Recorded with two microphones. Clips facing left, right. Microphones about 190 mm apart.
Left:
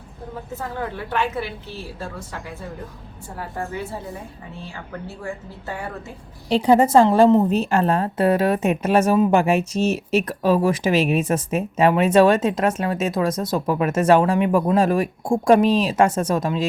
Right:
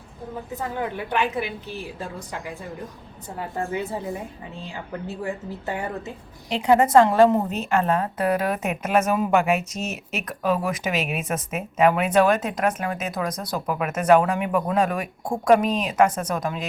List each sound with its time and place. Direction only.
0.5 s a woman's voice: 15° right (ahead or behind)
6.5 s a woman's voice: 30° left (ahead or behind)